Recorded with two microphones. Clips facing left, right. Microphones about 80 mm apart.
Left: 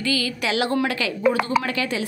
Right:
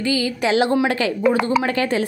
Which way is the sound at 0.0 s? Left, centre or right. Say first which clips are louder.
Right 4 dB; right.